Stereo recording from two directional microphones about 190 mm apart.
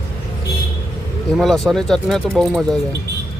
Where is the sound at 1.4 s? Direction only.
Centre (ahead or behind).